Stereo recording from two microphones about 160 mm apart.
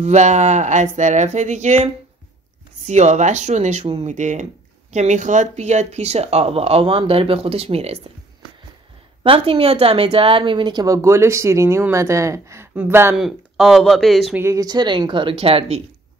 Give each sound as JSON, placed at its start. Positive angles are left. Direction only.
{"t": 0.0, "sound": "speech", "side_deg": -45}
{"t": 2.9, "sound": "speech", "side_deg": -45}
{"t": 9.2, "sound": "speech", "side_deg": -35}
{"t": 13.2, "sound": "speech", "side_deg": 0}
{"t": 14.4, "sound": "speech", "side_deg": -20}